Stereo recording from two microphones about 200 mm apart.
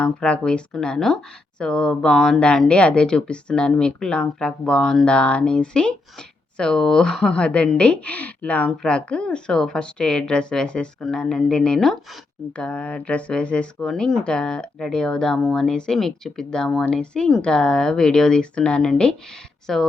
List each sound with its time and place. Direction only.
0.0 s speech: 5° left (ahead or behind)